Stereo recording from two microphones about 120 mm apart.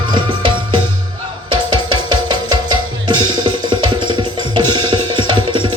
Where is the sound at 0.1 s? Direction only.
40° right (ahead or behind).